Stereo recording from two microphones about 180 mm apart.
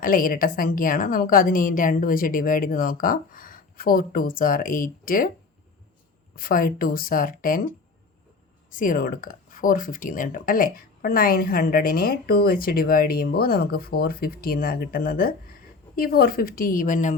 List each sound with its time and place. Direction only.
0.0 s a woman's voice: 50° left (ahead or behind)
6.3 s a woman's voice: 55° left (ahead or behind)
8.7 s a woman's voice: 50° left (ahead or behind)